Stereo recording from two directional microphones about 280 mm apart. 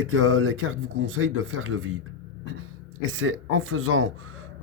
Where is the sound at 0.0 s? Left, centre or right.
Right.